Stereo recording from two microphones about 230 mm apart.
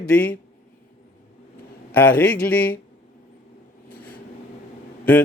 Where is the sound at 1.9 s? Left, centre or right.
Centre.